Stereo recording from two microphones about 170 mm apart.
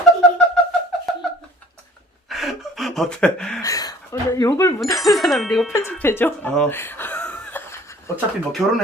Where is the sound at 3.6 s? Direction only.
20° left (ahead or behind).